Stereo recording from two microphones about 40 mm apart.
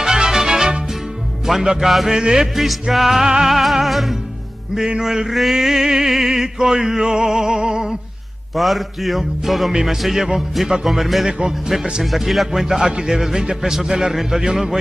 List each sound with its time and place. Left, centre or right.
0.0 s music: centre
1.5 s a man's voice: centre
2.1 s speech: centre
2.5 s speech: centre
4.7 s a man's voice: centre
8.5 s a man's voice: centre
11.2 s speech: centre
11.7 s a man's voice: centre